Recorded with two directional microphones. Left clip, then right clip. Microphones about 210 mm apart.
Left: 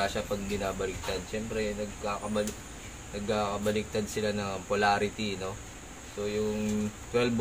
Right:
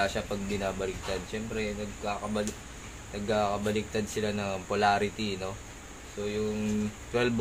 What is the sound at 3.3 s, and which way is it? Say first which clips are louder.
Speech: right 1 dB; 20° right (ahead or behind).